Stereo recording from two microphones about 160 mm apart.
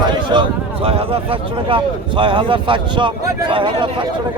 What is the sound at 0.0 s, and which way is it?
Speech, 30° right (ahead or behind).